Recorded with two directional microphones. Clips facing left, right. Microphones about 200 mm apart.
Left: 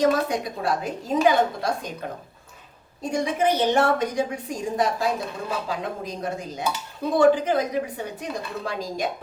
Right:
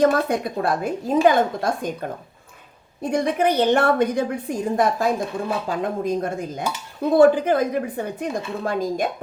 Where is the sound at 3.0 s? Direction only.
60° right (ahead or behind).